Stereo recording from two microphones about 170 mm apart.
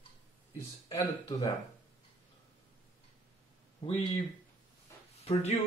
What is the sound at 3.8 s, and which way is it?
Speech, 30° left (ahead or behind).